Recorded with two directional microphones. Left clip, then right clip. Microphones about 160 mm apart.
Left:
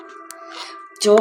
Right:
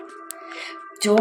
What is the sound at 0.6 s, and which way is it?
Music, 30° left (ahead or behind).